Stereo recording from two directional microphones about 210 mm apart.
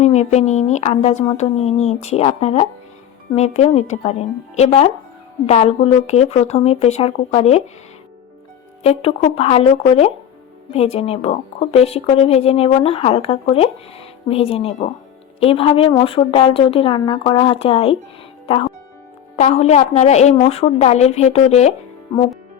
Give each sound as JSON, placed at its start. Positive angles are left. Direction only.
{"t": 0.0, "sound": "a woman's voice", "side_deg": 30}
{"t": 8.8, "sound": "a woman's voice", "side_deg": 30}